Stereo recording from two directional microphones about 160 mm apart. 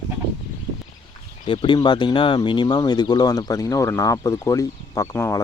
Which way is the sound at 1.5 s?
30° left (ahead or behind).